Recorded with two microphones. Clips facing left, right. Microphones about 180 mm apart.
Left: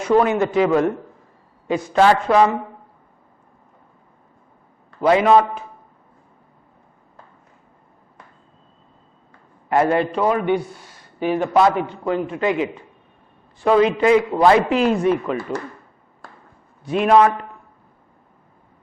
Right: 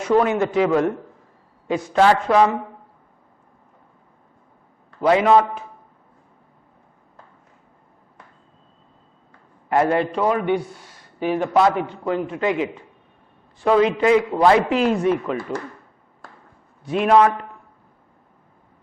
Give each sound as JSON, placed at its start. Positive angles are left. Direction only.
{"t": 0.0, "sound": "a man's voice", "side_deg": 15}
{"t": 5.0, "sound": "a man's voice", "side_deg": 10}
{"t": 9.6, "sound": "a man's voice", "side_deg": 15}
{"t": 16.9, "sound": "a man's voice", "side_deg": 10}